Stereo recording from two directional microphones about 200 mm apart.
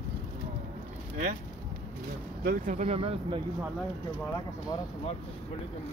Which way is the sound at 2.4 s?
40° right (ahead or behind).